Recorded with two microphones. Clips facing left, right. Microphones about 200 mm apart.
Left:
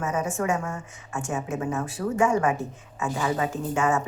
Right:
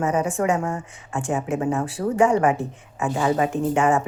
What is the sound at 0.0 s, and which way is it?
Speech, 30° right (ahead or behind).